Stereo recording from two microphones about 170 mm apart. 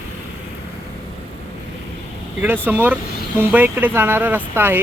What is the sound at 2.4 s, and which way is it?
Speech, 10° right (ahead or behind).